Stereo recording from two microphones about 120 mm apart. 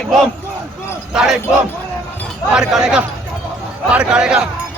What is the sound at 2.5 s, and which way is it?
A man's voice, 5° right (ahead or behind).